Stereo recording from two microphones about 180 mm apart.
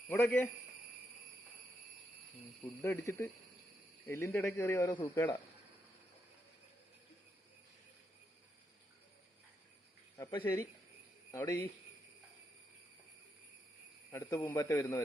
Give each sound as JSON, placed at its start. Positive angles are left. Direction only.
{"t": 0.1, "sound": "speech", "side_deg": 10}
{"t": 2.8, "sound": "speech", "side_deg": 15}
{"t": 10.2, "sound": "speech", "side_deg": 15}
{"t": 14.1, "sound": "speech", "side_deg": 15}